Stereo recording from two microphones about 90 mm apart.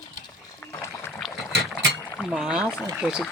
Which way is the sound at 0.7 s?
30° left (ahead or behind).